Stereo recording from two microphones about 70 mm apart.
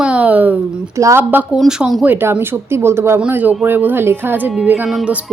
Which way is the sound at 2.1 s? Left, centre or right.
Right.